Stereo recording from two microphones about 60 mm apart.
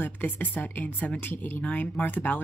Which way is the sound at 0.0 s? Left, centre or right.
Left.